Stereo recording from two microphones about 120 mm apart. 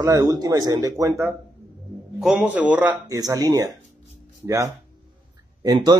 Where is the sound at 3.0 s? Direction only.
30° right (ahead or behind).